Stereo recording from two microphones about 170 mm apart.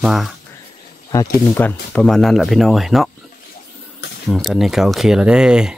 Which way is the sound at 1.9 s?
Centre (ahead or behind).